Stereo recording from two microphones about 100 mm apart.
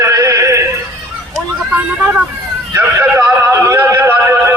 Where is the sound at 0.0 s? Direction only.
30° right (ahead or behind).